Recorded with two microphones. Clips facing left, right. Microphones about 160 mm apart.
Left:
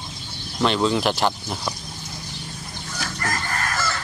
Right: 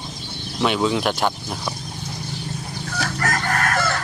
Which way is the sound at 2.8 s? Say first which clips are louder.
Right 4 dB; 65° right (ahead or behind).